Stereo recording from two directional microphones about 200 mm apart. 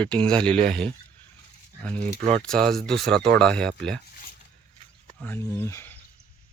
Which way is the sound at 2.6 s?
50° right (ahead or behind).